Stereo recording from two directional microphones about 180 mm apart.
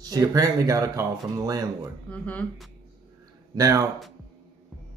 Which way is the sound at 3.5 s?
20° right (ahead or behind).